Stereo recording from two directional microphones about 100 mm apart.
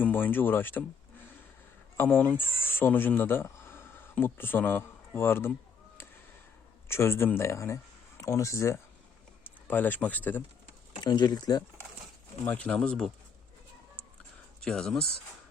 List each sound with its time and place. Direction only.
0.0 s speech: 20° left (ahead or behind)
2.0 s speech: 20° left (ahead or behind)
6.8 s speech: 25° left (ahead or behind)
9.6 s speech: 20° left (ahead or behind)
11.0 s speech: 50° left (ahead or behind)
12.5 s speech: 15° left (ahead or behind)
14.6 s speech: 5° left (ahead or behind)